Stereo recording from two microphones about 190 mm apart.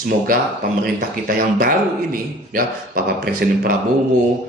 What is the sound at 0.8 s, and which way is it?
Speech, 50° right (ahead or behind).